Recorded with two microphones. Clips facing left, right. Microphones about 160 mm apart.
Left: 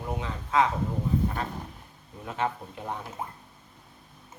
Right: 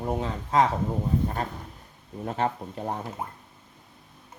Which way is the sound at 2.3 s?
40° right (ahead or behind).